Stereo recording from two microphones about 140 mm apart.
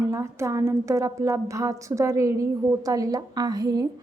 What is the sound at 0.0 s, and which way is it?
Speech, 20° right (ahead or behind).